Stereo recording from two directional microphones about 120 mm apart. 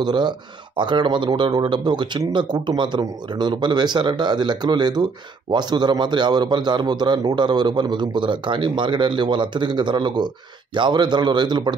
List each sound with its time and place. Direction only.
0.0 s a man's voice: 40° right (ahead or behind)